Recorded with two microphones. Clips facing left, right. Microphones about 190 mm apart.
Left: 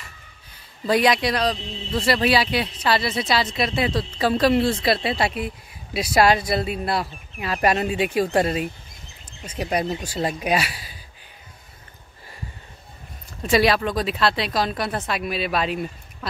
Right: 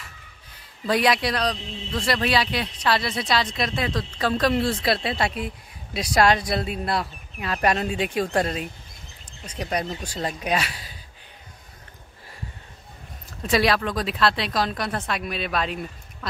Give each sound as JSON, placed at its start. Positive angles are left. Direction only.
{"t": 0.8, "sound": "speech", "side_deg": 0}
{"t": 13.4, "sound": "speech", "side_deg": 0}